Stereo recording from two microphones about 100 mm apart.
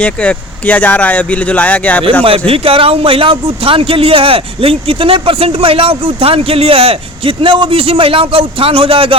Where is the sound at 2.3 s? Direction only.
70° right (ahead or behind).